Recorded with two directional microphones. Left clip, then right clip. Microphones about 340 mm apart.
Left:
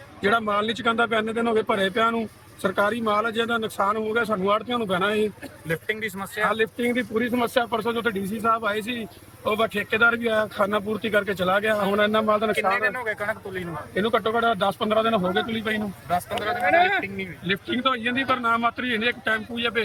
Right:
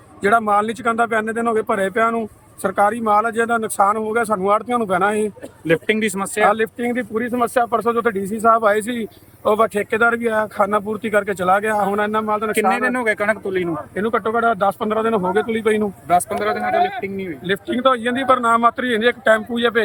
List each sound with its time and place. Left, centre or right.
0.2 s speech: centre
5.6 s speech: right
6.5 s speech: centre
12.5 s speech: right
13.9 s speech: centre
17.5 s speech: centre